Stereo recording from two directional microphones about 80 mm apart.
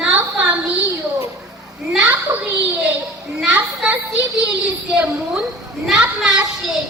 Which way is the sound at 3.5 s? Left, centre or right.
Centre.